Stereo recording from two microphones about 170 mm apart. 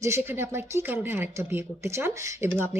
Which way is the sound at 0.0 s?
15° right (ahead or behind).